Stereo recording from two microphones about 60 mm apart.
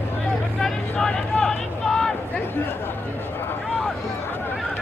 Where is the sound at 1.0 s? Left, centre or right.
Centre.